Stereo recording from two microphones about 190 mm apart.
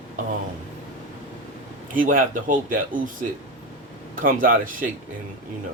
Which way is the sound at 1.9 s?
45° right (ahead or behind).